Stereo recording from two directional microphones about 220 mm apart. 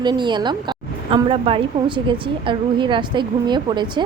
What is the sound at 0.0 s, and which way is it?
A woman's voice, 20° right (ahead or behind).